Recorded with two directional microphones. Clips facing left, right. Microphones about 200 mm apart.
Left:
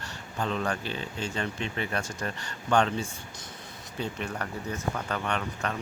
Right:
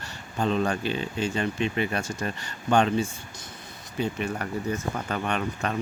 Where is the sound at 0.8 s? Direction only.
15° right (ahead or behind).